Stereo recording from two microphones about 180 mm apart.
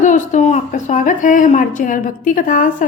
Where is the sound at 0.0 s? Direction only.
45° left (ahead or behind).